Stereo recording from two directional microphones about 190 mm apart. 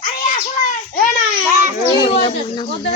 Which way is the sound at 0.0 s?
45° left (ahead or behind).